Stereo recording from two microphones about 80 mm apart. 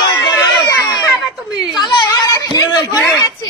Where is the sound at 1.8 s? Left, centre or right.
Left.